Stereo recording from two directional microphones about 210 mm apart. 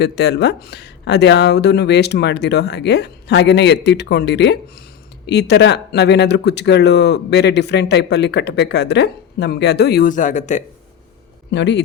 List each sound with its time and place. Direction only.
0.0 s speech: 55° left (ahead or behind); by 10.6 s 35° left (ahead or behind)
11.5 s a man's voice: 55° left (ahead or behind)